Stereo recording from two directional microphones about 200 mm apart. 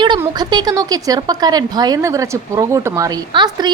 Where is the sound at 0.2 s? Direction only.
20° right (ahead or behind).